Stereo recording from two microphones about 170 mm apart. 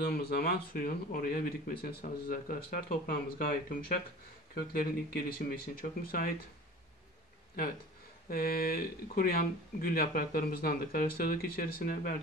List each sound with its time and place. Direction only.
0.0 s speech: 65° left (ahead or behind)
8.3 s speech: 60° left (ahead or behind)